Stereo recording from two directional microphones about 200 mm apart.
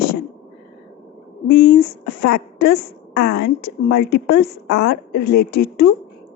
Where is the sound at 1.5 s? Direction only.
55° left (ahead or behind).